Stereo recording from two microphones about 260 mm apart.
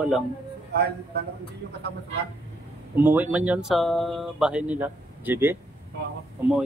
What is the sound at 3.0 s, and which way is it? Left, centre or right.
Speech, centre.